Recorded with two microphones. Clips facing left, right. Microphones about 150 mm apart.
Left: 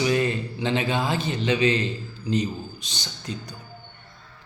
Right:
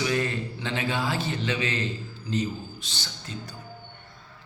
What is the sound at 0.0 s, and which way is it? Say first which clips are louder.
A man's voice: left 4 dB; 20° left (ahead or behind).